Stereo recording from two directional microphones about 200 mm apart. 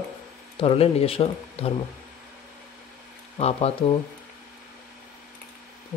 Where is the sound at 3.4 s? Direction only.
30° left (ahead or behind).